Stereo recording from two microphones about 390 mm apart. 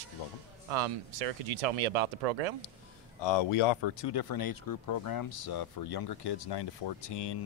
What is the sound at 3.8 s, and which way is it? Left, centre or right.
Speech, left.